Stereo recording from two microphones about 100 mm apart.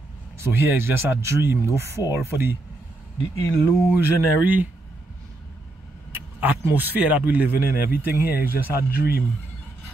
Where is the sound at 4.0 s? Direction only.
20° right (ahead or behind).